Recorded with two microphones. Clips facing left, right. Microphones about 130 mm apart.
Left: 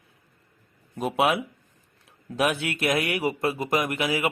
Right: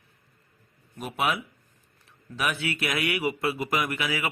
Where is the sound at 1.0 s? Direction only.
65° left (ahead or behind).